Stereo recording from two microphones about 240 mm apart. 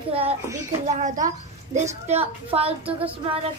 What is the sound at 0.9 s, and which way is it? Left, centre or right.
A woman's voice, right.